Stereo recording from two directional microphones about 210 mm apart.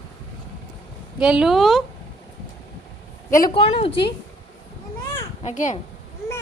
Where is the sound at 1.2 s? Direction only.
5° right (ahead or behind).